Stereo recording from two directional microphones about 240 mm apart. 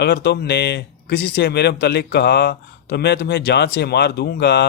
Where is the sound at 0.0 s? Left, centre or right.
Left.